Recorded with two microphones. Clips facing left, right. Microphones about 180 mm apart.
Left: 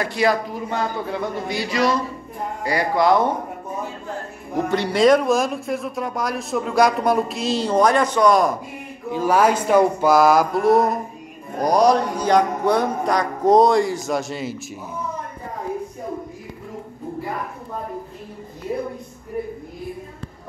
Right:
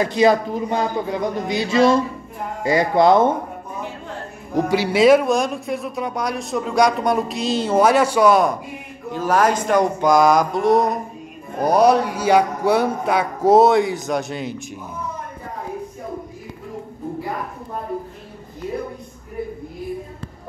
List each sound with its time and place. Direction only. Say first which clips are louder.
0.0 s speech: right 4 dB; 20° right (ahead or behind)
4.6 s speech: right 2 dB; 10° right (ahead or behind)
9.1 s speech: left 1 dB; 10° left (ahead or behind)